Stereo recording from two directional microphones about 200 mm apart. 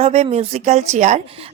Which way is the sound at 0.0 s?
30° right (ahead or behind).